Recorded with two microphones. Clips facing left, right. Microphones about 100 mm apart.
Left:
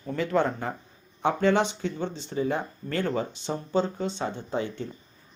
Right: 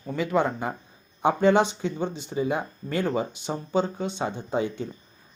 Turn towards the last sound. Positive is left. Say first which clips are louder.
# right 3 dB
turn(degrees=-15)  # may be behind; listen again after turning